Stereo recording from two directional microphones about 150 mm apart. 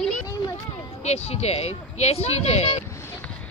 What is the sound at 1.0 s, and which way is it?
Speech, 45° left (ahead or behind).